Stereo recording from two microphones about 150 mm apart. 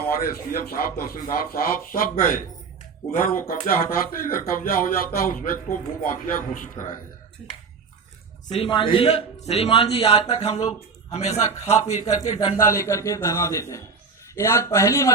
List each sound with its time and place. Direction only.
0.2 s speech: 90° left; by 6.8 s 65° left (ahead or behind)
8.4 s a man's voice: 35° left (ahead or behind)
11.1 s a man's voice: 45° left (ahead or behind)
12.6 s a man's voice: 20° left (ahead or behind)